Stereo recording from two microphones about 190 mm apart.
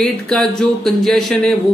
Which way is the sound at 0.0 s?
5° left (ahead or behind).